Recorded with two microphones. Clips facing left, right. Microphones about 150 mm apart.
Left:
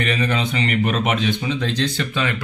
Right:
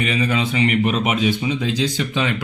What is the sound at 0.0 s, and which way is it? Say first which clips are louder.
Speech: right 1 dB; 5° right (ahead or behind).